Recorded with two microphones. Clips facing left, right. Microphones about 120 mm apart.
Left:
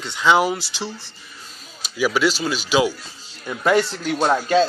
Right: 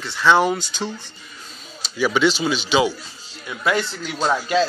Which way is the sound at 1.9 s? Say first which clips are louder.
Right 1 dB; 5° left (ahead or behind).